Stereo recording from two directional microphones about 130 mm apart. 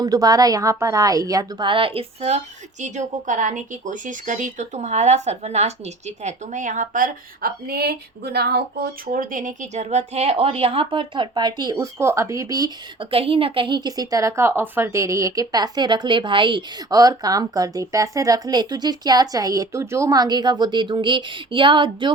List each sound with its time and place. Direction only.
0.0 s speech: 30° right (ahead or behind); by 2.4 s 50° right (ahead or behind)
2.8 s speech: 70° right (ahead or behind); by 7.1 s 85° right
9.0 s a woman's voice: 90° right; by 12.7 s 30° right (ahead or behind)
13.0 s a woman's voice: 45° right (ahead or behind)